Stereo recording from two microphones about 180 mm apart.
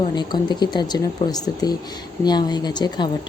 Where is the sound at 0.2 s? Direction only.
25° left (ahead or behind).